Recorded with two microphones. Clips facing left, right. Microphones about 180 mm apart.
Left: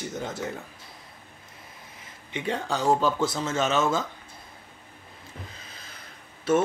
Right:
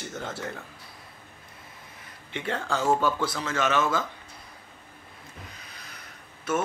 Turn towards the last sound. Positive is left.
turn(degrees=30)  # may be behind; listen again after turning